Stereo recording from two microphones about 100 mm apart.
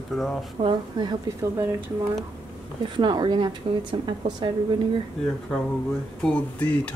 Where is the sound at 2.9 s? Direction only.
50° right (ahead or behind).